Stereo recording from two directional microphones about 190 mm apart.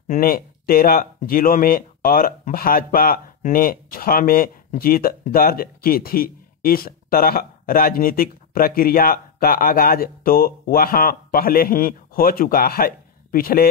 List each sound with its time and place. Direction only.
0.1 s speech: 50° left (ahead or behind)